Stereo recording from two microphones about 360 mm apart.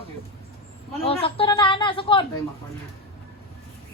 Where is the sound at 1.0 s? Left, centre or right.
Centre.